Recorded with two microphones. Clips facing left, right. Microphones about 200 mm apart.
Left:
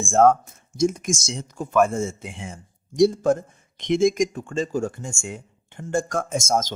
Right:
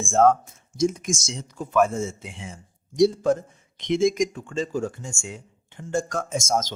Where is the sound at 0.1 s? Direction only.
50° left (ahead or behind).